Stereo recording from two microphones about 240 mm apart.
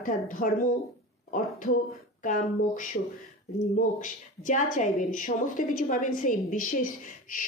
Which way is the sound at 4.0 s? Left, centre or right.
Left.